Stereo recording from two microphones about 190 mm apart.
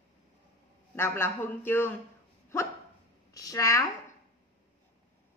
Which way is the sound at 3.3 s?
15° left (ahead or behind).